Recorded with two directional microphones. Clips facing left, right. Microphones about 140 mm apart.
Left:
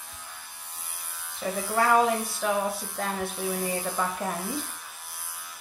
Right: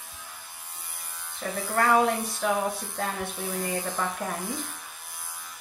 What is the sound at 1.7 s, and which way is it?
Speech, centre (ahead or behind).